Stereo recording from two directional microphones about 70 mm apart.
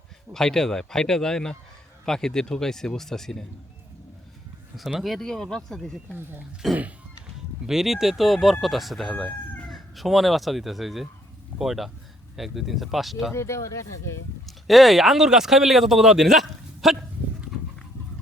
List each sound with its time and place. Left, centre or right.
0.3 s speech: centre
4.9 s speech: centre
6.6 s speech: centre
13.3 s speech: left
14.4 s speech: centre